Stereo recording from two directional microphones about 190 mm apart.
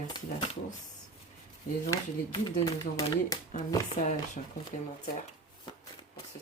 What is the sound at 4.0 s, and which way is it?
Speech, 40° left (ahead or behind).